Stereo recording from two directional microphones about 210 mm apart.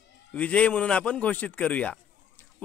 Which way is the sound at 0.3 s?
5° left (ahead or behind).